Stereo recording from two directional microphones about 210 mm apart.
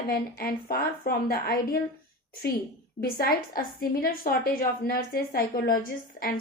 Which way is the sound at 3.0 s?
45° left (ahead or behind).